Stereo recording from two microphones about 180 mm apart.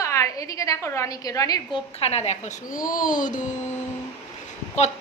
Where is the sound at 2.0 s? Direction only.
35° left (ahead or behind).